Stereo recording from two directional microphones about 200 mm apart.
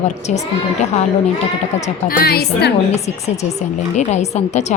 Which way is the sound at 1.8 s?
45° left (ahead or behind).